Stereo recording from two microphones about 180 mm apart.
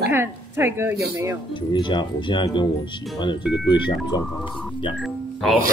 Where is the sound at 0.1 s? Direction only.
15° right (ahead or behind).